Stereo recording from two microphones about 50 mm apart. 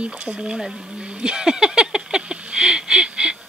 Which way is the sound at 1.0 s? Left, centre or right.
Centre.